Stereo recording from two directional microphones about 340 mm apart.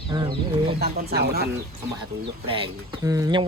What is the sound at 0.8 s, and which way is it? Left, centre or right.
Speech, right.